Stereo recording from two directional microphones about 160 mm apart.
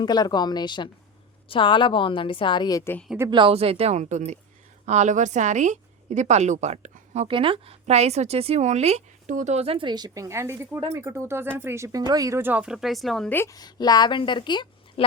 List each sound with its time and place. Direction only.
0.0 s a woman's voice: 25° left (ahead or behind)
3.2 s a woman's voice: 30° right (ahead or behind); by 13.3 s centre (ahead or behind)
13.3 s a woman's voice: 20° left (ahead or behind)